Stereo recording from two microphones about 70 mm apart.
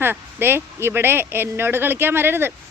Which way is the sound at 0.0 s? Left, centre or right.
Right.